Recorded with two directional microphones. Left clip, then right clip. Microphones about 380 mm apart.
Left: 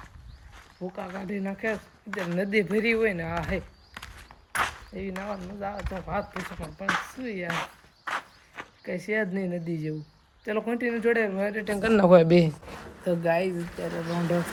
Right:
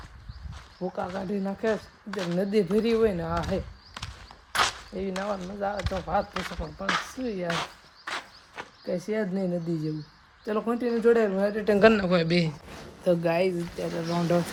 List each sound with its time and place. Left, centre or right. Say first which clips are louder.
0.8 s speech: right 4 dB; centre
4.5 s a sound: right 3 dB; centre
5.4 s speech: right 4 dB; centre
11.9 s speech: left 8 dB; centre